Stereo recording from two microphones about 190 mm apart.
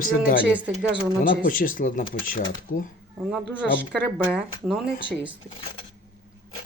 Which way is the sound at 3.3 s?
5° right (ahead or behind).